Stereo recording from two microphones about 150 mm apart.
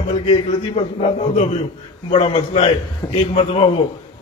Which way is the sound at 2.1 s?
40° left (ahead or behind).